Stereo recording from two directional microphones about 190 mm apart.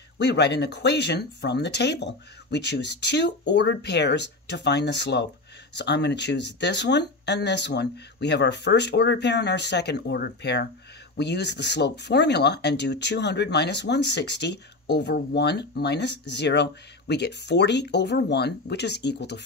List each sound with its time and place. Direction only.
0.2 s speech: 65° left (ahead or behind)